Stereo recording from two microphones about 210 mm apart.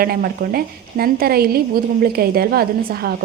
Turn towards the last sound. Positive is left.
turn(degrees=-45)  # may be behind; listen again after turning